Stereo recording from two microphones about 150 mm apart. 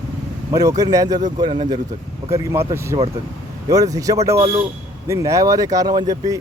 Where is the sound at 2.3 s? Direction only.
20° right (ahead or behind).